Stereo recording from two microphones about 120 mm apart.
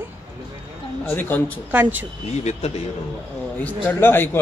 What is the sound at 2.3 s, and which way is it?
Speech, 65° left (ahead or behind).